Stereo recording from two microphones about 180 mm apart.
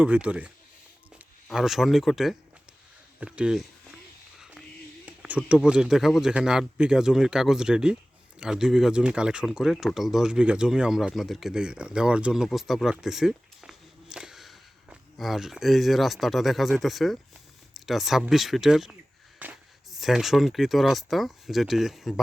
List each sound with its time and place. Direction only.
0.0 s speech: 5° right (ahead or behind)
5.0 s speech: 5° right (ahead or behind)
19.4 s a sound: 10° right (ahead or behind)
20.0 s speech: centre (ahead or behind)